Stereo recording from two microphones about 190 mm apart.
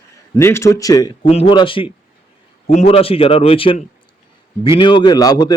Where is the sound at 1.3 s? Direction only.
30° left (ahead or behind).